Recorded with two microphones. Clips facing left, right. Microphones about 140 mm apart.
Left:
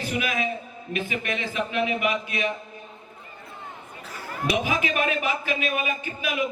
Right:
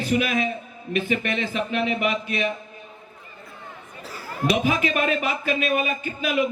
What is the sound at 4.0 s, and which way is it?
Speech, 30° right (ahead or behind).